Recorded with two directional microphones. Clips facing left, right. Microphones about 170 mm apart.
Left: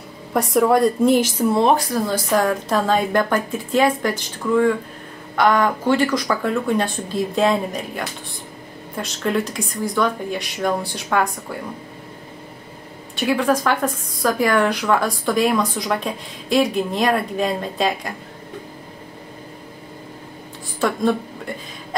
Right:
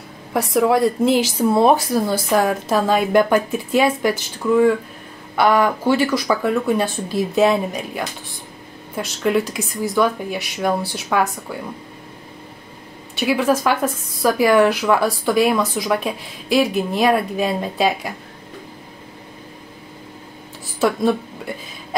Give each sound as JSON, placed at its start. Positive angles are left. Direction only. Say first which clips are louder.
{"t": 0.7, "sound": "speech", "louder": "left 1 dB", "side_deg": -85}
{"t": 1.2, "sound": "speech", "louder": "right 2 dB", "side_deg": -10}
{"t": 13.2, "sound": "speech", "louder": "right 1 dB", "side_deg": -5}